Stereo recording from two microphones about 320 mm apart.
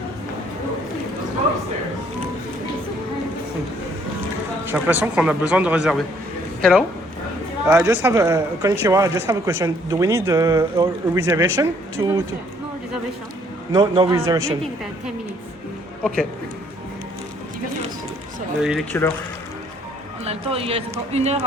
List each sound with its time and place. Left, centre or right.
4.7 s speech: centre
13.7 s speech: centre
18.6 s speech: centre
20.2 s speech: centre